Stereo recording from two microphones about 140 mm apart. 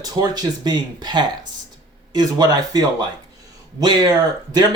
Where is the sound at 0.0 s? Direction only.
30° right (ahead or behind).